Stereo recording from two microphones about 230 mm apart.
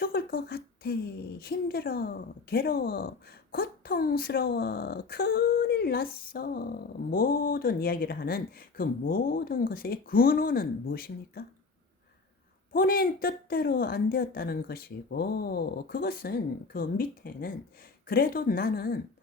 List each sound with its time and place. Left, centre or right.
0.0 s a sound: left
1.4 s a woman's voice: left
12.7 s a woman's voice: left